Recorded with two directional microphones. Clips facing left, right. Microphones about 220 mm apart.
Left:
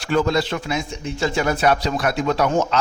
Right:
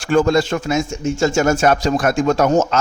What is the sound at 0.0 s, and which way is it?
A man's voice, 50° right (ahead or behind).